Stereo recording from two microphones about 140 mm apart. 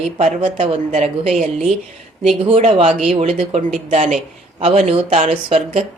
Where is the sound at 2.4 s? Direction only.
45° right (ahead or behind).